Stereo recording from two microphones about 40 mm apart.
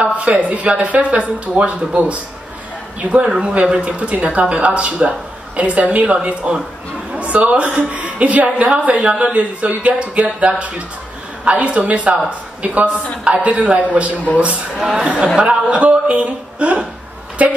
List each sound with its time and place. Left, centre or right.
0.2 s speech: right
3.3 s speech: right
3.8 s a woman's voice: right
14.9 s speech: right